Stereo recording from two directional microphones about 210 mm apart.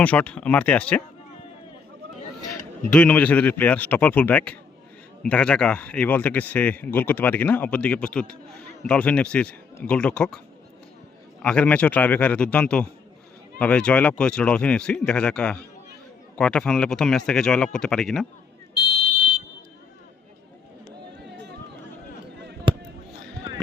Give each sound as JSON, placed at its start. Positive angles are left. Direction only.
{"t": 0.0, "sound": "speech", "side_deg": 5}
{"t": 2.9, "sound": "speech", "side_deg": 5}
{"t": 11.4, "sound": "speech", "side_deg": 5}
{"t": 21.2, "sound": "a sound", "side_deg": -55}